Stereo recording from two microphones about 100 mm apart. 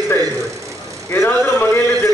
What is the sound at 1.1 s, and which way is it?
Speech, 20° left (ahead or behind).